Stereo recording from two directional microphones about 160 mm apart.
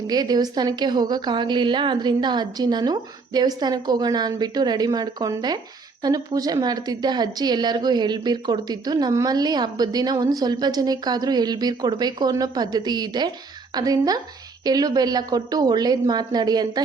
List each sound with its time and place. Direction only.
0.1 s a woman's voice: 25° right (ahead or behind)